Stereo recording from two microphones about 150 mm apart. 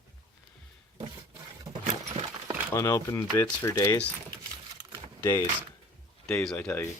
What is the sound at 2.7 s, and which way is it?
Speech, 20° left (ahead or behind).